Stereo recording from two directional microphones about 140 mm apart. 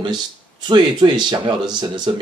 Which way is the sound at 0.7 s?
35° right (ahead or behind).